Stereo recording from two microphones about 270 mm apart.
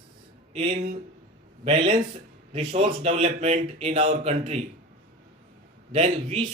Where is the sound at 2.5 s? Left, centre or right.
Right.